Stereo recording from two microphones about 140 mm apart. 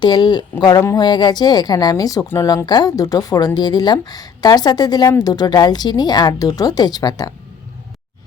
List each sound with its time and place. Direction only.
0.0 s a woman's voice: 30° left (ahead or behind)